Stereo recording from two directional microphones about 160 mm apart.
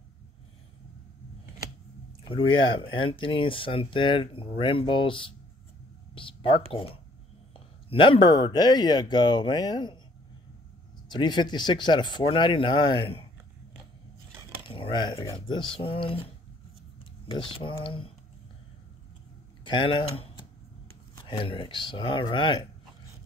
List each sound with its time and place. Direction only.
2.2 s speech: 30° left (ahead or behind)
11.1 s speech: 30° left (ahead or behind)
14.7 s speech: 30° left (ahead or behind)
17.6 s speech: 30° left (ahead or behind)
19.6 s speech: 30° left (ahead or behind)